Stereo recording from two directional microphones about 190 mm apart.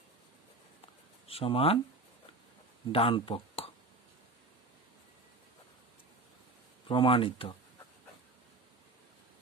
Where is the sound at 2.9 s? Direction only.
30° left (ahead or behind).